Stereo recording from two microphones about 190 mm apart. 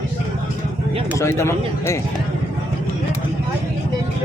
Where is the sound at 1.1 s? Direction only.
15° left (ahead or behind).